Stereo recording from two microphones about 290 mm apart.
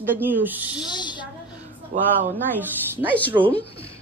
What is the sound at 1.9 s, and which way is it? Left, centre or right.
Speech, right.